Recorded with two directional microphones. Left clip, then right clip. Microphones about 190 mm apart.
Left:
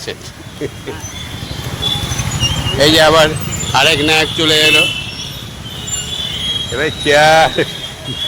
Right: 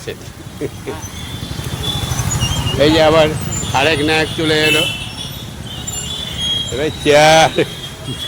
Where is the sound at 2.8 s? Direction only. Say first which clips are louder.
Left 2 dB; centre (ahead or behind).